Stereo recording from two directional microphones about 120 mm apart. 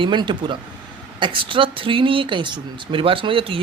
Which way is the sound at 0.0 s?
40° right (ahead or behind).